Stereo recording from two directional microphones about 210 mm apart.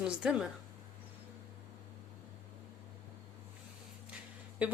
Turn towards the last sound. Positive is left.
turn(degrees=-5)  # may be behind; listen again after turning